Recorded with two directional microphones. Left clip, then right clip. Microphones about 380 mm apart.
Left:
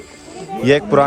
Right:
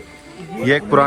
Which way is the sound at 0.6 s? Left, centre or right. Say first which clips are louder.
Left 2 dB; centre.